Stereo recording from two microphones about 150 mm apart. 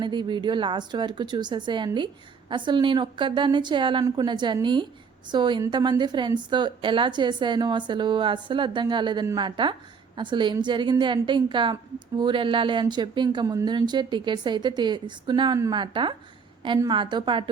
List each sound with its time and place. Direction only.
0.0 s a woman's voice: 30° right (ahead or behind)